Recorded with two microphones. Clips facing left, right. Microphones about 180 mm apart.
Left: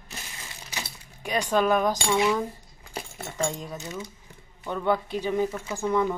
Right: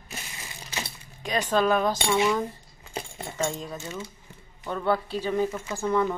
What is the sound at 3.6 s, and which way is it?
Speech, 15° left (ahead or behind).